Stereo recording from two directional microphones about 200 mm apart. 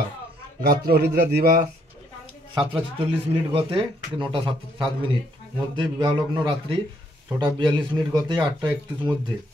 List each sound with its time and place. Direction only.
0.6 s speech: 50° right (ahead or behind)
2.5 s speech: 25° right (ahead or behind)